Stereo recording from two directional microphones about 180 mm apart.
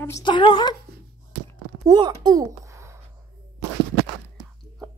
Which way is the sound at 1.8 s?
25° right (ahead or behind).